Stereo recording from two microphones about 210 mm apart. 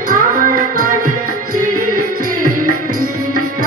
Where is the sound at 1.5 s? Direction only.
40° right (ahead or behind).